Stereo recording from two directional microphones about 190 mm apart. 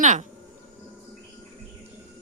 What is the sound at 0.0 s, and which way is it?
Speech, 40° right (ahead or behind).